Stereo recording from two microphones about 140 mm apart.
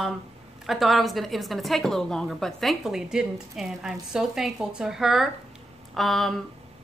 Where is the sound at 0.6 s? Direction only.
Centre (ahead or behind).